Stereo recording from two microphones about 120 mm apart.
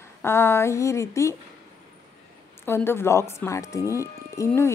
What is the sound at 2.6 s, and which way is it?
A woman's voice, 20° left (ahead or behind).